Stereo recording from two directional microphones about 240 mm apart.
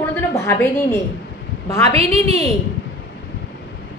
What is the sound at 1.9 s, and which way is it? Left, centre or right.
Speech, right.